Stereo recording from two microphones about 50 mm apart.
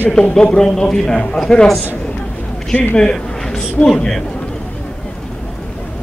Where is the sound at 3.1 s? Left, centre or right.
Centre.